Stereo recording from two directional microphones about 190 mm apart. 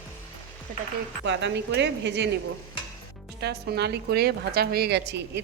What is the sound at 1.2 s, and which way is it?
Speech, 70° right (ahead or behind).